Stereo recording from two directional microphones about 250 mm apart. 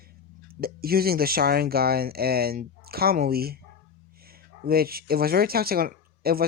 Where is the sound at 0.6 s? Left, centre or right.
Right.